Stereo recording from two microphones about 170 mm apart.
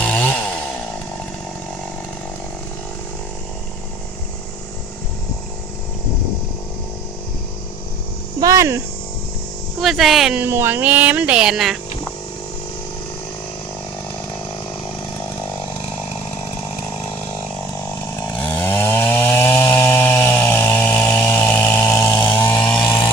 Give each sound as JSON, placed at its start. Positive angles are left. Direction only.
{"t": 0.0, "sound": "chainsaw", "side_deg": 10}
{"t": 8.4, "sound": "speech", "side_deg": -20}
{"t": 9.8, "sound": "speech", "side_deg": 0}
{"t": 18.0, "sound": "chainsaw", "side_deg": 20}